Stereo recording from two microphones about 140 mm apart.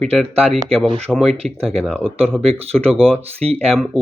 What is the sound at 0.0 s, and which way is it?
Speech, 5° left (ahead or behind).